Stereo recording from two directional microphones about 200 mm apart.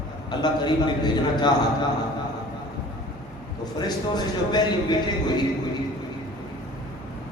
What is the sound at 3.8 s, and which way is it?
A man's voice, 20° left (ahead or behind).